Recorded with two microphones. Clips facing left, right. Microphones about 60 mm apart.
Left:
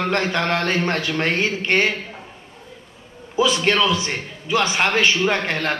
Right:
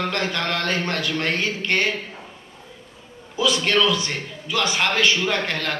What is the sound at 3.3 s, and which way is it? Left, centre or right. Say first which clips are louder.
A man's voice: left 2 dB; left.